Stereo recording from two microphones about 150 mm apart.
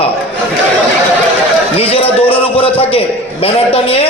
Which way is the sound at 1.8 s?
40° left (ahead or behind).